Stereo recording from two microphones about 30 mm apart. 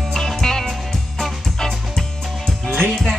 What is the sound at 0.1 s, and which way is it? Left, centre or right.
Music, centre.